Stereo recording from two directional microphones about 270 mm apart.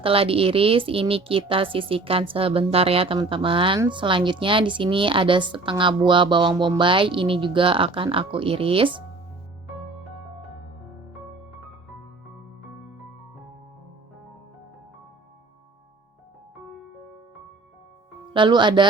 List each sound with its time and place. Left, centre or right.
0.0 s a woman's voice: right
18.3 s speech: centre